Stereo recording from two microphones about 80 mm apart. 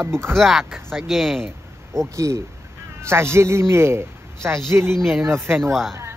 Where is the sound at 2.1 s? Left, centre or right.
Right.